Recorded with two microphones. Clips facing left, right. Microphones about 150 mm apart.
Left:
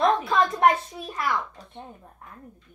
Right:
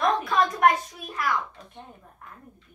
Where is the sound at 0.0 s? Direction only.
25° left (ahead or behind).